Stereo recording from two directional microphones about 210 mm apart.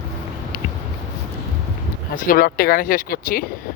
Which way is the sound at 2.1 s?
40° left (ahead or behind).